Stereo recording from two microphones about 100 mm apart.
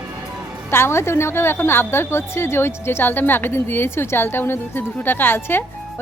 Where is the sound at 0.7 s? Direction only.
25° left (ahead or behind).